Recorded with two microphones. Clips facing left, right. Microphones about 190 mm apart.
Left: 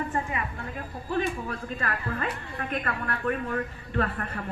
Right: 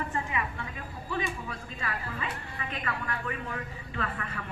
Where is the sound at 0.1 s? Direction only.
40° left (ahead or behind).